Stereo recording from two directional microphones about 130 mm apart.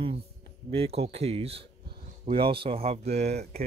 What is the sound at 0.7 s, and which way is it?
Speech, 50° right (ahead or behind).